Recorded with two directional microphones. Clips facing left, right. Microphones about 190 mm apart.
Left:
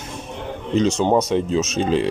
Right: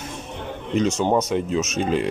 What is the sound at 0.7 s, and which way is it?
Speech, 30° left (ahead or behind).